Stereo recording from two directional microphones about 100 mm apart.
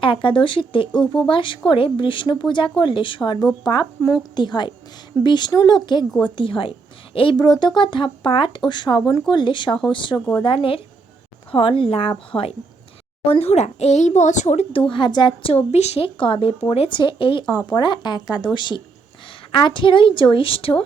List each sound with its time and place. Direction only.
0.0 s a woman's voice: 55° left (ahead or behind)
3.6 s speech: 45° left (ahead or behind)
6.2 s a woman's voice: 55° left (ahead or behind)
7.3 s a woman's voice: 50° left (ahead or behind)
10.2 s speech: 15° left (ahead or behind)
10.4 s a woman's voice: 60° left (ahead or behind)
13.2 s speech: 80° left
14.5 s a woman's voice: 80° left
16.9 s a woman's voice: 55° left (ahead or behind)
17.7 s a woman's voice: 45° left (ahead or behind); by 20.7 s 65° left (ahead or behind)